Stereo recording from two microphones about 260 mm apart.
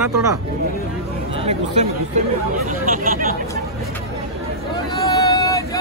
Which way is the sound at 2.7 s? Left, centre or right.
Right.